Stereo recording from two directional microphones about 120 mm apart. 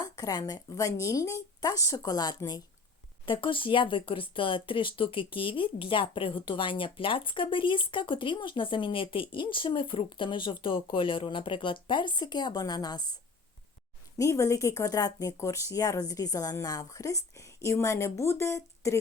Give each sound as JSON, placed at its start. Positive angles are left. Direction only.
{"t": 0.0, "sound": "a woman's voice", "side_deg": 35}
{"t": 14.2, "sound": "speech", "side_deg": 25}